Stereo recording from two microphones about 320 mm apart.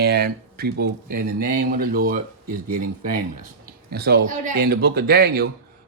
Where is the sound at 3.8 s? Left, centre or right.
Right.